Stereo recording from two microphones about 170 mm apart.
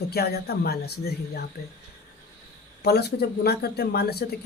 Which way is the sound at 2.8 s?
75° left (ahead or behind).